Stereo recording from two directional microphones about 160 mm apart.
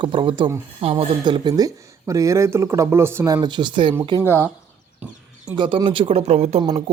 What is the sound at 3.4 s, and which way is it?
Speech, 30° right (ahead or behind).